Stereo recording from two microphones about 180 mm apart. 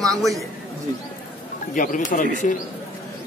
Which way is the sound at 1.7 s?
45° left (ahead or behind).